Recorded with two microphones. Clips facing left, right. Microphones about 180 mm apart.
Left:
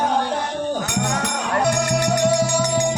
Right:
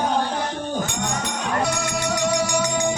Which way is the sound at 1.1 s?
70° left (ahead or behind).